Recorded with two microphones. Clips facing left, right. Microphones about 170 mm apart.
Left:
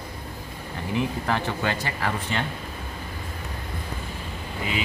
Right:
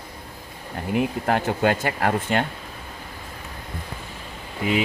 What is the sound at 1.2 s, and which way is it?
Speech, 50° right (ahead or behind).